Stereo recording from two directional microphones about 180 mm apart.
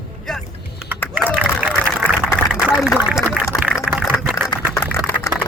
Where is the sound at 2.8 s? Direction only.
5° right (ahead or behind).